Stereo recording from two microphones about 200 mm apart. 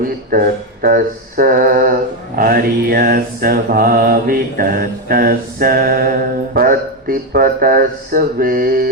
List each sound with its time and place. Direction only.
0.0 s mantra: 45° right (ahead or behind)